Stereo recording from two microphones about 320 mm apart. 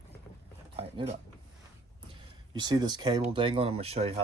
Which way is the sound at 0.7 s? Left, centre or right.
Centre.